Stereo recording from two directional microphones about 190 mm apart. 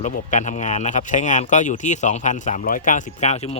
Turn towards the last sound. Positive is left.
turn(degrees=35)  # may be behind; listen again after turning